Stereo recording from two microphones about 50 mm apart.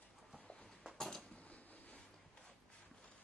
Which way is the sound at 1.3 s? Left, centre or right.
Left.